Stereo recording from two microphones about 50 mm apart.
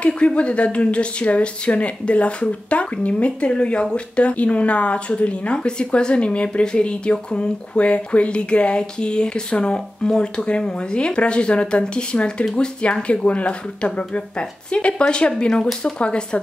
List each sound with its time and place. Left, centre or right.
0.0 s a woman's voice: left